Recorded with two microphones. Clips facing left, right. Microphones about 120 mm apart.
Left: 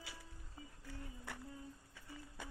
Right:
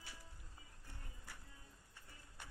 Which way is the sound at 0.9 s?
75° left (ahead or behind).